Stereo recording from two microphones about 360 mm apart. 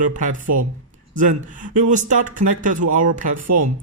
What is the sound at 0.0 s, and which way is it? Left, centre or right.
Speech, right.